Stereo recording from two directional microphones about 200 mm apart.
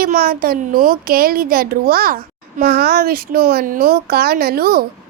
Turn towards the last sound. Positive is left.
turn(degrees=-50)  # may be behind; listen again after turning